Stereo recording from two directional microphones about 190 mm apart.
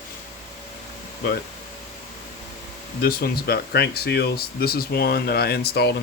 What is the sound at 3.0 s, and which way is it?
Speech, 55° left (ahead or behind).